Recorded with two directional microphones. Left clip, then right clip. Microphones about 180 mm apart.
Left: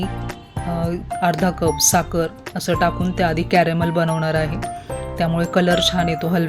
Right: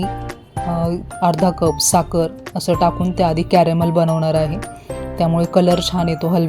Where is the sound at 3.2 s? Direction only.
15° right (ahead or behind).